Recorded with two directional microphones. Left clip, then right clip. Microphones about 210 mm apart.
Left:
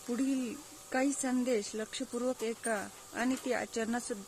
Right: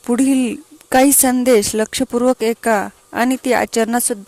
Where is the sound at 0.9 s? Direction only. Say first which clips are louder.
Right 19 dB; 50° right (ahead or behind).